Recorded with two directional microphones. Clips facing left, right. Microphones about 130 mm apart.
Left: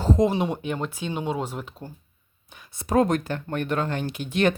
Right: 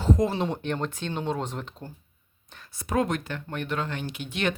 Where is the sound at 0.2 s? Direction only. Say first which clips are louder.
Left 4 dB; 15° left (ahead or behind).